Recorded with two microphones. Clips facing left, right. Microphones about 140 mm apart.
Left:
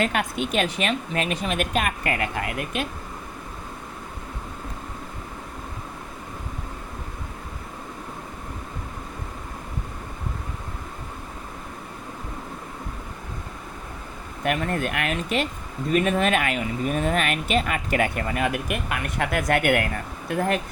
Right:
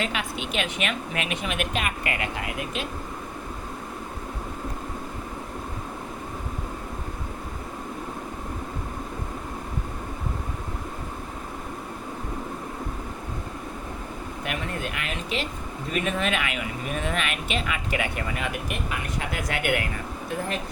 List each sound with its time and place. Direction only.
0.0 s speech: 50° left (ahead or behind)
14.4 s speech: 50° left (ahead or behind)